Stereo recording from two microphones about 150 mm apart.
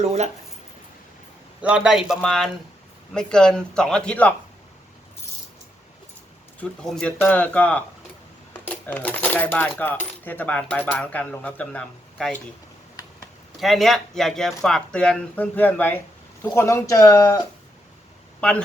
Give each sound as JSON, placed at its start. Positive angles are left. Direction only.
{"t": 0.0, "sound": "speech", "side_deg": -50}
{"t": 1.6, "sound": "speech", "side_deg": -5}
{"t": 6.6, "sound": "speech", "side_deg": 5}
{"t": 13.6, "sound": "speech", "side_deg": 0}